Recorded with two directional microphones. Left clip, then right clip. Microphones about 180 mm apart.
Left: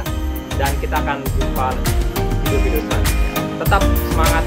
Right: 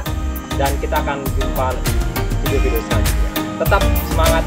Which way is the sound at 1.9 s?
Centre (ahead or behind).